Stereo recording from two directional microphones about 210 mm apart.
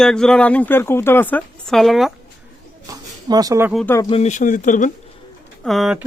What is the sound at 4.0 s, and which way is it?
Speech, 25° left (ahead or behind).